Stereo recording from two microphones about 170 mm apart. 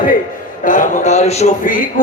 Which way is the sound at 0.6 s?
50° left (ahead or behind).